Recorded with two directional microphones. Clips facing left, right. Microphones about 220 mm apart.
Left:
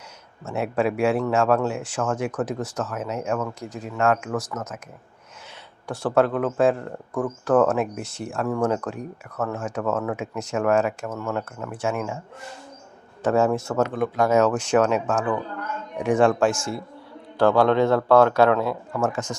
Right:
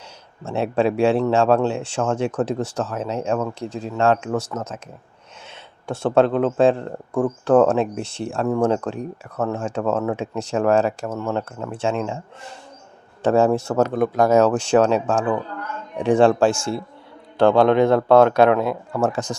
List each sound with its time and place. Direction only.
0.4 s speech: 30° right (ahead or behind)
5.8 s speech: 25° right (ahead or behind)
13.2 s speech: 30° right (ahead or behind)
18.9 s speech: 35° right (ahead or behind)